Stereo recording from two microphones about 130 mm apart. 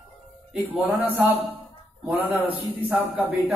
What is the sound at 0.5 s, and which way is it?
A man's voice, 15° right (ahead or behind).